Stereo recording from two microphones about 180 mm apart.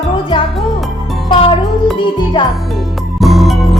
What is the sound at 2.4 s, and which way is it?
Speech, 30° left (ahead or behind).